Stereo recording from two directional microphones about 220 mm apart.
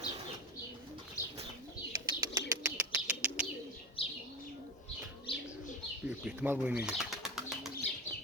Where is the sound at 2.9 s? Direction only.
5° right (ahead or behind).